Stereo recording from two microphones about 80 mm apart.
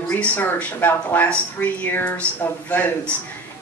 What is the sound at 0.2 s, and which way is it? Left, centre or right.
Speech, left.